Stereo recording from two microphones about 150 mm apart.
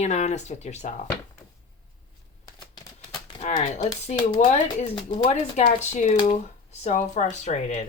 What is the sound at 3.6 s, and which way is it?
Speech, 50° left (ahead or behind).